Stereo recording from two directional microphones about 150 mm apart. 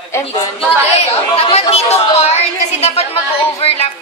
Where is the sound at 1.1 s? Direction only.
40° left (ahead or behind).